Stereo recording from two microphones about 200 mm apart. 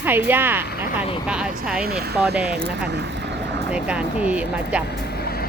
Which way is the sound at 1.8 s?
50° right (ahead or behind).